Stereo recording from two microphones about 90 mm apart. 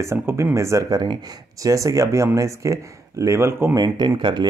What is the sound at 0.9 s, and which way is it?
Speech, 50° right (ahead or behind).